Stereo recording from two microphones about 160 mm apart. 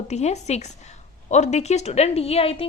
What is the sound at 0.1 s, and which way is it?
Speech, 45° left (ahead or behind).